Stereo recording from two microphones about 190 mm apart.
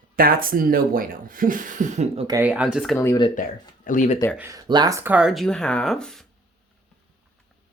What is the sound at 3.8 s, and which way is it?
Speech, 40° left (ahead or behind).